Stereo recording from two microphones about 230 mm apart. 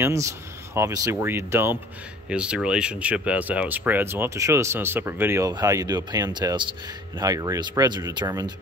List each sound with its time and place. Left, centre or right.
0.0 s speech: centre